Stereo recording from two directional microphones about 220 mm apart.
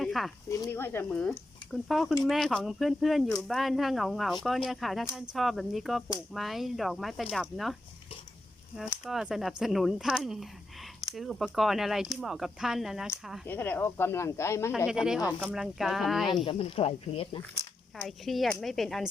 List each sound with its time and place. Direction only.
0.0 s snake: centre (ahead or behind)
0.4 s speech: 15° left (ahead or behind)
8.8 s speech: 5° right (ahead or behind)
13.5 s speech: 10° left (ahead or behind)
14.8 s speech: 5° right (ahead or behind)
16.3 s speech: 25° left (ahead or behind)
17.9 s speech: centre (ahead or behind)